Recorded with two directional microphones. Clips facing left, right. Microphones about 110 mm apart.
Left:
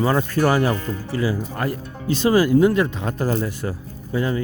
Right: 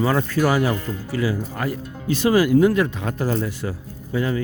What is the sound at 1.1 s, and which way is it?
Speech, 30° left (ahead or behind).